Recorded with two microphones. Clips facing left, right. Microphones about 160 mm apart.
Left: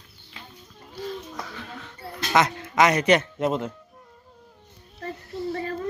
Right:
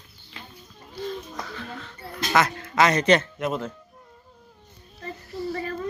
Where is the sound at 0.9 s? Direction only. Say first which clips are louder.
Right 1 dB; 5° left (ahead or behind).